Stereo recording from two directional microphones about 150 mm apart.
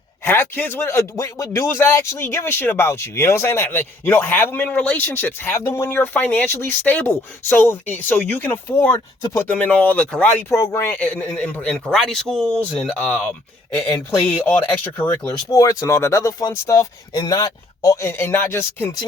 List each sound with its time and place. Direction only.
0.3 s speech: 15° left (ahead or behind)
10.5 s a man's voice: 15° left (ahead or behind)